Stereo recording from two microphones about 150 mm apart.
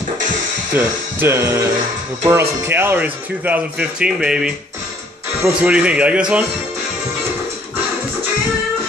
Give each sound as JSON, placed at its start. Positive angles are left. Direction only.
{"t": 0.7, "sound": "speech", "side_deg": -15}